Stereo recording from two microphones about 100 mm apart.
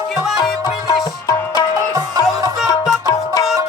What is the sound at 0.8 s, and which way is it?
Music, 40° left (ahead or behind).